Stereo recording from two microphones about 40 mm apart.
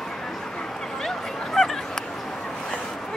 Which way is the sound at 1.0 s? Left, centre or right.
Centre.